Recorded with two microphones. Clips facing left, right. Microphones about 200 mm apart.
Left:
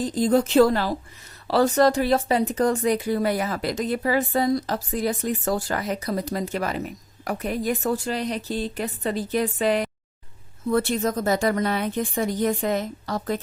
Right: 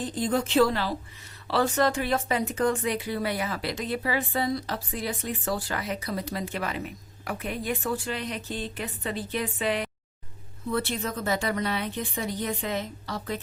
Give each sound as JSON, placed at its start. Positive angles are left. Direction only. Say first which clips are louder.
{"t": 0.0, "sound": "a woman's voice", "louder": "left 7 dB", "side_deg": 40}